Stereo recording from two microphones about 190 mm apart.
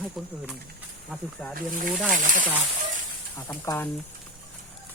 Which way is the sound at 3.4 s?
20° left (ahead or behind).